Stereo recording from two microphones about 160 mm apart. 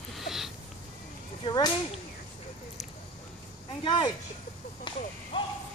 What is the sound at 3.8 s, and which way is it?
Speech, 30° left (ahead or behind).